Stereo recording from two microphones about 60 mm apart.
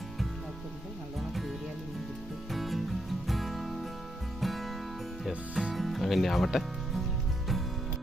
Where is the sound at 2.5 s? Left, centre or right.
Centre.